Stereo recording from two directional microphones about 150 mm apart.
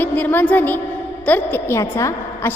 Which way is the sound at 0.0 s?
10° left (ahead or behind).